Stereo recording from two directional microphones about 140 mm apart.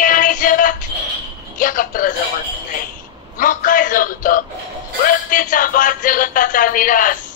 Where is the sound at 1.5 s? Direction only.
75° left (ahead or behind).